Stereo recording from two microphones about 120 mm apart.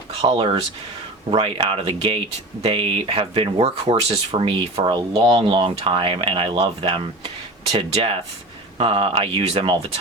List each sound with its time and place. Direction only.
0.3 s speech: 45° right (ahead or behind)